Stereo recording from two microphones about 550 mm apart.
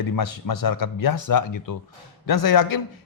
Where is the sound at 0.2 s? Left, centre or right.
Left.